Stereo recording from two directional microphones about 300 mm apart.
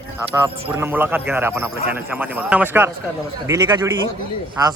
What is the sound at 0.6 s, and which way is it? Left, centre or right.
Speech, centre.